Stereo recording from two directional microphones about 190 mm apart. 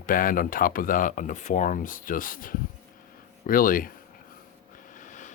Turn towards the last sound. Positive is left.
turn(degrees=40)  # may be behind; listen again after turning